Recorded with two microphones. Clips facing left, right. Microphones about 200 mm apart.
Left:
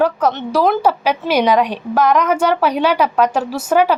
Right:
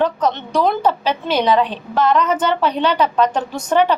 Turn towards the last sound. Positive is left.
turn(degrees=5)  # may be behind; listen again after turning